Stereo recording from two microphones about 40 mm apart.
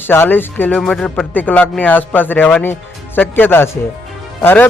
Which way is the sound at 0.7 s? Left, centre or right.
Centre.